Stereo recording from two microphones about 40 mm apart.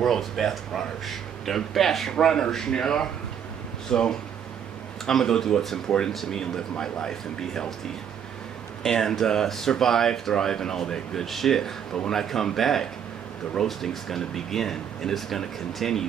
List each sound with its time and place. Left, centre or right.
0.0 s speech: centre
8.8 s speech: centre